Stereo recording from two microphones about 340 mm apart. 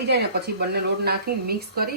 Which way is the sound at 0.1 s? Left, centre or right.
Right.